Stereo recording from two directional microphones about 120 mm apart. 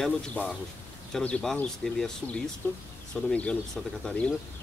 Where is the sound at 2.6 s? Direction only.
20° left (ahead or behind).